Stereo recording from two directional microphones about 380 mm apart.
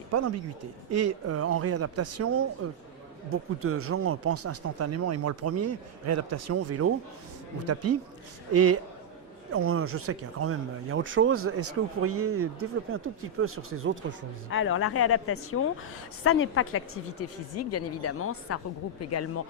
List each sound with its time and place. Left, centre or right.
0.1 s speech: right
14.5 s speech: left